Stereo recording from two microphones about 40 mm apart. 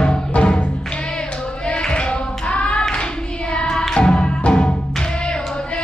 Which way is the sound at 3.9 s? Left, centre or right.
Left.